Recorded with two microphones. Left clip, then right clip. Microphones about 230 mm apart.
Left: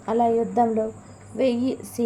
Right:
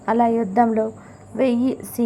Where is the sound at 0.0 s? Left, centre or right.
Centre.